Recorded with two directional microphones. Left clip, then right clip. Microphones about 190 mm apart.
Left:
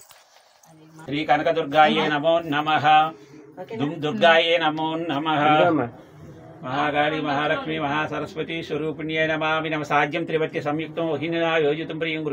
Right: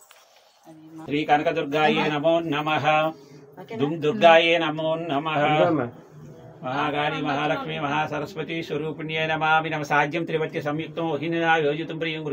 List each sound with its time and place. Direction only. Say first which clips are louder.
1.0 s a man's voice: left 1 dB; 15° right (ahead or behind)
4.2 s a man's voice: right 1 dB; 25° right (ahead or behind)